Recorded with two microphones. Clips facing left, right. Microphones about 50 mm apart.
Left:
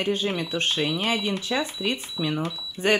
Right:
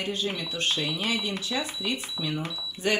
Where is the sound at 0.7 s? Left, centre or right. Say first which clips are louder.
Left 2 dB; centre.